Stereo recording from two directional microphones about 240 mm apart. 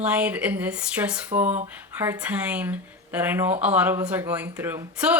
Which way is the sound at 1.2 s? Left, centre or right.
Right.